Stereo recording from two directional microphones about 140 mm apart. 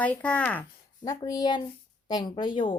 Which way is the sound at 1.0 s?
25° left (ahead or behind).